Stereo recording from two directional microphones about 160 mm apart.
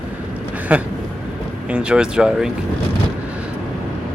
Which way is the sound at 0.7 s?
10° right (ahead or behind).